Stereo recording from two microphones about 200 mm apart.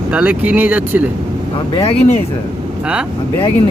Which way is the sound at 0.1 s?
5° right (ahead or behind).